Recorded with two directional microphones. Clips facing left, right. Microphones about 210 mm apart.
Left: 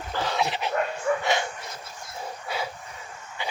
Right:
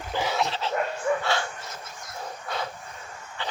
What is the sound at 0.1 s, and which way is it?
Dog, 15° right (ahead or behind).